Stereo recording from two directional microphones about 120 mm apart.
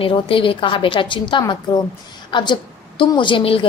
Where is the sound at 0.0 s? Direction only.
50° left (ahead or behind).